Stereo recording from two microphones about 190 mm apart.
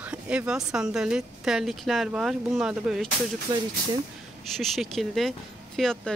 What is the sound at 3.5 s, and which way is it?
Speech, 20° right (ahead or behind).